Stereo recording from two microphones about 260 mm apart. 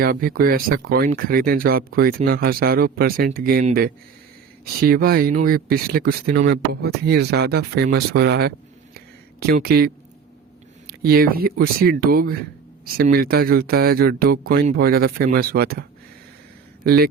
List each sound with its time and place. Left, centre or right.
0.0 s speech: right
9.6 s speech: right
16.8 s speech: right